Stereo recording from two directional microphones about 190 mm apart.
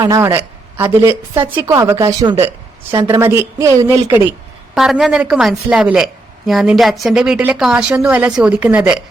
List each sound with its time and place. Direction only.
0.0 s a man's voice: 15° right (ahead or behind)
3.2 s speech: 10° right (ahead or behind)